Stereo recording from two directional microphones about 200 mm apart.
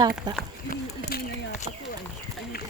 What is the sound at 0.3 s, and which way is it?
Speech, 20° right (ahead or behind).